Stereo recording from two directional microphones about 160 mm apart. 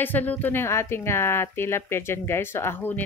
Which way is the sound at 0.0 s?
10° left (ahead or behind).